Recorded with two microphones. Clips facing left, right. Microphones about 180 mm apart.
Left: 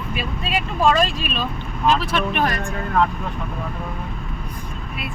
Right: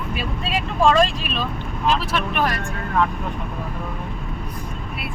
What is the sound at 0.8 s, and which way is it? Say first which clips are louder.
Speech: right 2 dB; 10° left (ahead or behind).